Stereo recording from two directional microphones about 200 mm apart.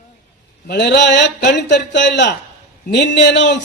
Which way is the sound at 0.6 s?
60° left (ahead or behind).